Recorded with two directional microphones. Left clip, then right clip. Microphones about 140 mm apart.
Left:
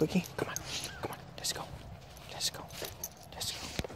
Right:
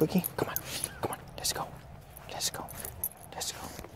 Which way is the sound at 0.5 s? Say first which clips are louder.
Even; 45° right (ahead or behind).